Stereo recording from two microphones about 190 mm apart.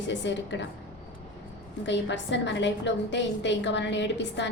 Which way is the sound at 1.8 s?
70° left (ahead or behind).